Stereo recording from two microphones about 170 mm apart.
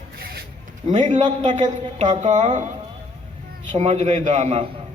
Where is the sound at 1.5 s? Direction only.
45° right (ahead or behind).